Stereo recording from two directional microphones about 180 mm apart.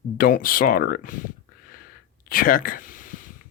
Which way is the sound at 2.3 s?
50° left (ahead or behind).